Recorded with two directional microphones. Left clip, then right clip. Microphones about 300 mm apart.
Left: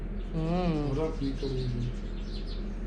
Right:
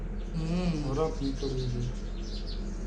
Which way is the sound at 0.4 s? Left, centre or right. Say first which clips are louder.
Left 4 dB; centre.